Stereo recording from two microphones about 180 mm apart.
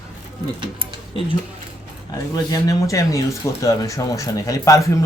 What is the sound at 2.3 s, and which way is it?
Speech, 20° left (ahead or behind).